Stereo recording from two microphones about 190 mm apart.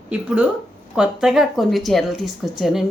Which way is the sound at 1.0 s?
Centre (ahead or behind).